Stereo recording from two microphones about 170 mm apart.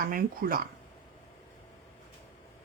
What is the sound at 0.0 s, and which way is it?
Speech, 60° right (ahead or behind).